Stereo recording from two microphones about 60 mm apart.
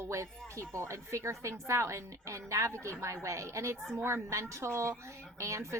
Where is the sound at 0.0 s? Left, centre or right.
Right.